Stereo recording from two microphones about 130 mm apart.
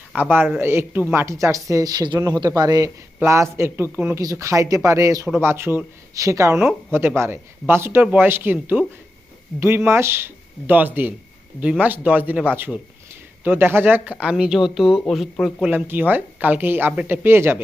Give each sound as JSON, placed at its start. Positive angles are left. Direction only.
{"t": 0.1, "sound": "speech", "side_deg": -15}
{"t": 9.6, "sound": "speech", "side_deg": -20}
{"t": 15.6, "sound": "speech", "side_deg": -15}